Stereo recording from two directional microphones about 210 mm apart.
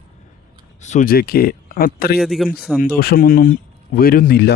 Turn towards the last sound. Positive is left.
turn(degrees=50)  # may be behind; listen again after turning